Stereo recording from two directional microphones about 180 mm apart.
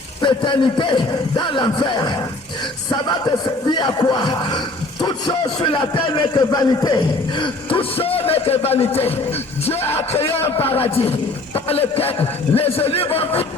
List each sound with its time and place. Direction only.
0.2 s speech: 25° left (ahead or behind)
10.1 s a man's voice: 30° left (ahead or behind)